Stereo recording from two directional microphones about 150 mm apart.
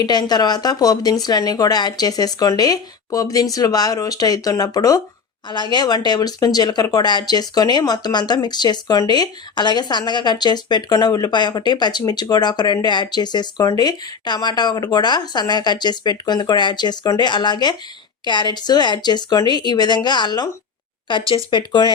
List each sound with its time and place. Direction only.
0.0 s speech: 25° left (ahead or behind)